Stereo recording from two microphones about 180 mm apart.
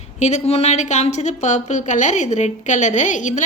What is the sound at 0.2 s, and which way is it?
A woman's voice, 40° left (ahead or behind).